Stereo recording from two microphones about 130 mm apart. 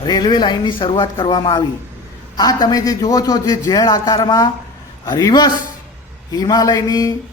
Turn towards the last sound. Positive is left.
turn(degrees=25)  # may be behind; listen again after turning